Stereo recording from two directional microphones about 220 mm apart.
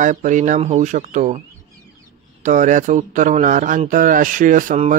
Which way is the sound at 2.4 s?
35° right (ahead or behind).